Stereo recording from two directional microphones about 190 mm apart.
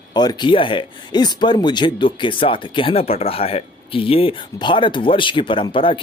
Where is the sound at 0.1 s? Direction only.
20° left (ahead or behind).